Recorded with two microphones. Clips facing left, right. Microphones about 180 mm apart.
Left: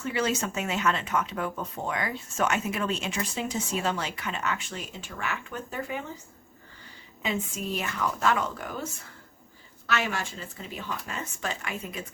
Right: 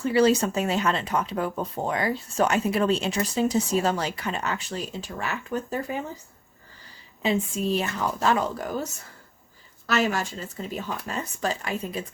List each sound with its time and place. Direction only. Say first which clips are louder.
0.0 s speech: right 8 dB; 35° right (ahead or behind)
7.2 s a woman's voice: right 6 dB; 30° right (ahead or behind)